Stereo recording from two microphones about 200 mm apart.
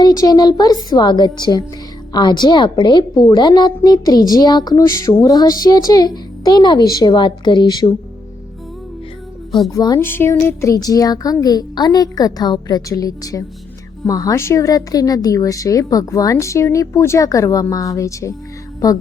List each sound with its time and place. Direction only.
0.0 s a child's voice: 20° left (ahead or behind)
9.7 s a woman's voice: 20° left (ahead or behind)